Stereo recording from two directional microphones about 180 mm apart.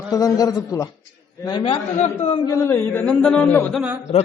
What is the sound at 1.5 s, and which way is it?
Speech, 30° left (ahead or behind).